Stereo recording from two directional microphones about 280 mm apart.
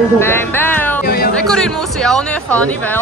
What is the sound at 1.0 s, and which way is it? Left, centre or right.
Speech, left.